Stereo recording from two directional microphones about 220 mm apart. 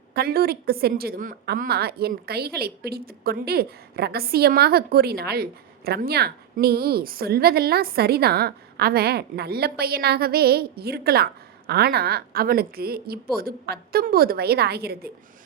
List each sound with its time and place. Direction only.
0.1 s a woman's voice: 45° right (ahead or behind)